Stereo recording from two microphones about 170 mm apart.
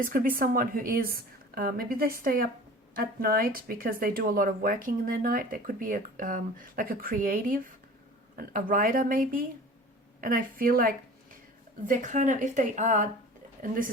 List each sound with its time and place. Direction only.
0.0 s speech: 55° right (ahead or behind)
11.9 s a woman's voice: 45° right (ahead or behind)